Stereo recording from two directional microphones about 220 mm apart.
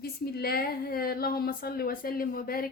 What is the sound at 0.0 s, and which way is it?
A woman's voice, 45° left (ahead or behind).